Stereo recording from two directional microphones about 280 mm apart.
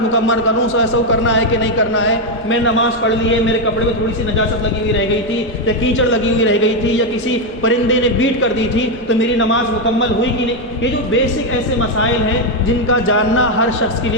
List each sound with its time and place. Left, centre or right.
0.1 s a man's voice: left
2.0 s a man's voice: left
5.6 s a man's voice: left
9.0 s a man's voice: left
12.9 s a man's voice: left